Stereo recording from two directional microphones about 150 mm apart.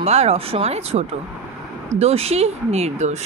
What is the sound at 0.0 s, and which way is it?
Speech, 45° right (ahead or behind).